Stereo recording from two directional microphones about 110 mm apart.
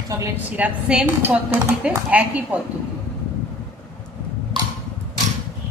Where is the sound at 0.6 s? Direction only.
10° right (ahead or behind).